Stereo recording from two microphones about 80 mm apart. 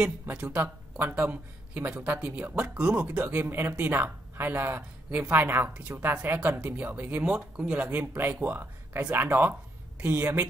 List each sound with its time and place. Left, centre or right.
0.0 s speech: centre